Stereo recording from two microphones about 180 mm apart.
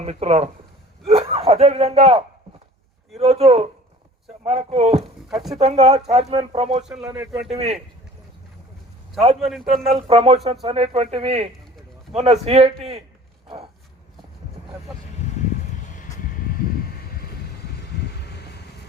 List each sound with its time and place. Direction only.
0.0 s speech: 35° right (ahead or behind)
5.3 s speech: centre (ahead or behind)
5.5 s speech: 35° right (ahead or behind)
6.8 s speech: 5° right (ahead or behind)
7.5 s speech: 35° right (ahead or behind)
9.4 s speech: centre (ahead or behind)
10.1 s speech: 35° right (ahead or behind)
18.1 s vehicle: 65° left (ahead or behind)